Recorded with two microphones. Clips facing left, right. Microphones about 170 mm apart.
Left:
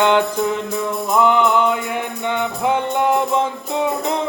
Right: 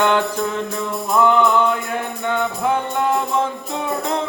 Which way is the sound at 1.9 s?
15° left (ahead or behind).